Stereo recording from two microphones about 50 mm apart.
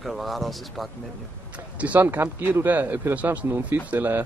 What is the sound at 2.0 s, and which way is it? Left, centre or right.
Speech, right.